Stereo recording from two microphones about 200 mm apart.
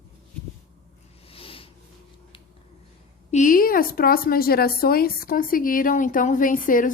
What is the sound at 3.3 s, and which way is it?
A woman's voice, 40° left (ahead or behind).